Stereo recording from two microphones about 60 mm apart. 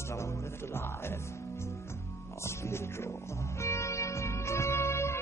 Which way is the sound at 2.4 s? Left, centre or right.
Left.